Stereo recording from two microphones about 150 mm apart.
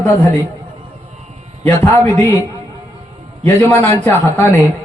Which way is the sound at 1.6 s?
15° left (ahead or behind).